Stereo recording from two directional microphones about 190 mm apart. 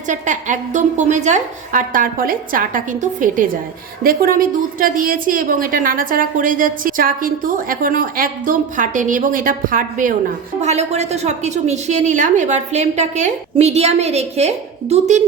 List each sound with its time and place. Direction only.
0.1 s a woman's voice: 40° right (ahead or behind)